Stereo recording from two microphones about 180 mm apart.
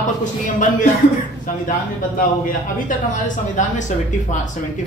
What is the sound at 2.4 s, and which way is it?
Speech, 50° left (ahead or behind).